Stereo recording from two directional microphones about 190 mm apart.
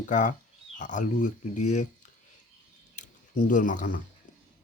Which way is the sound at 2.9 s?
40° left (ahead or behind).